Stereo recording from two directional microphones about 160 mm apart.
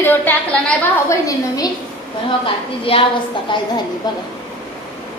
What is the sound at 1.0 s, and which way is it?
Speech, 20° left (ahead or behind).